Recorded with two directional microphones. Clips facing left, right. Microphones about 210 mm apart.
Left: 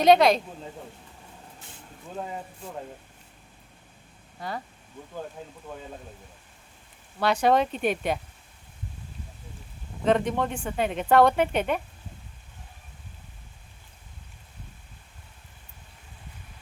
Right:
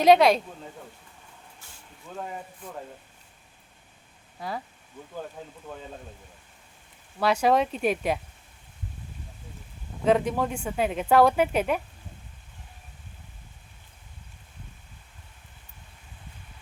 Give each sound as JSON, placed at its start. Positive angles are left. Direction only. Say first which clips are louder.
{"t": 0.0, "sound": "speech", "louder": "even", "side_deg": -5}
{"t": 2.1, "sound": "speech", "louder": "left 1 dB", "side_deg": 25}
{"t": 4.4, "sound": "speech", "louder": "even", "side_deg": 0}
{"t": 7.2, "sound": "speech", "louder": "even", "side_deg": -5}
{"t": 10.1, "sound": "speech", "louder": "right 1 dB", "side_deg": -5}